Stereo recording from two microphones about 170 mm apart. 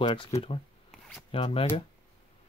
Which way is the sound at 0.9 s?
Centre (ahead or behind).